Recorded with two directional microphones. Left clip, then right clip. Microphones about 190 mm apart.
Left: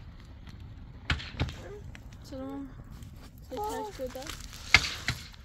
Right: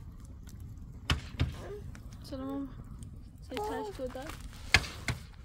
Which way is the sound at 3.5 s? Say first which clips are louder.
Left 2 dB; 20° right (ahead or behind).